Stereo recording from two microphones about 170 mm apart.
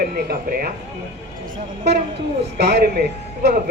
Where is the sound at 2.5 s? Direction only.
75° right (ahead or behind).